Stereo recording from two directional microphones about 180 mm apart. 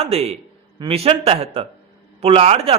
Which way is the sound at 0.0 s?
35° right (ahead or behind).